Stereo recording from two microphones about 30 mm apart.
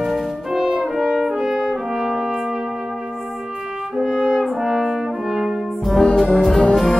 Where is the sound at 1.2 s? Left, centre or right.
Right.